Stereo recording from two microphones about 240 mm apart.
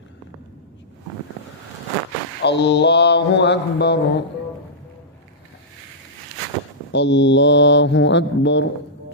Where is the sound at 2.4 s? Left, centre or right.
Left.